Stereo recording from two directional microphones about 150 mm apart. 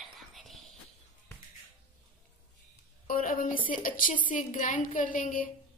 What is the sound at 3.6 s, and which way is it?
A woman's voice, 65° left (ahead or behind).